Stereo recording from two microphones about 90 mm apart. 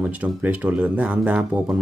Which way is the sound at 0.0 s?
20° right (ahead or behind).